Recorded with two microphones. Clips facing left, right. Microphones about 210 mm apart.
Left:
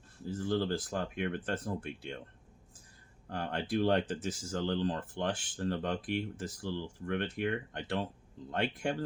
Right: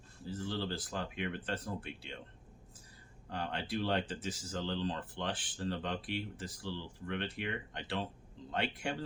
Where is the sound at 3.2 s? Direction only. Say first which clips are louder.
Left 3 dB; 50° left (ahead or behind).